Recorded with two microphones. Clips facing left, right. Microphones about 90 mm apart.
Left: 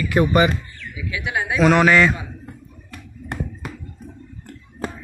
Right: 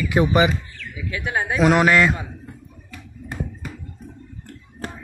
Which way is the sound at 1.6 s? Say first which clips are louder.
Left 2 dB; 5° right (ahead or behind).